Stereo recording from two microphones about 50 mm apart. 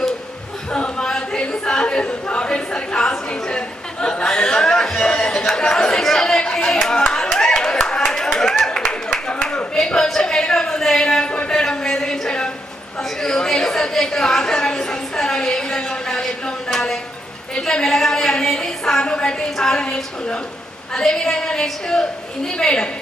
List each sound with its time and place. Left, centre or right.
0.7 s a sound: centre
4.0 s speech: centre
7.3 s clapping: centre
11.4 s a sound: centre
17.5 s a woman's voice: centre
19.8 s a woman's voice: left